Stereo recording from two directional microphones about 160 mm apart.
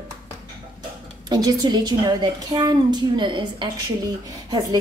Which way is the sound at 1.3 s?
25° right (ahead or behind).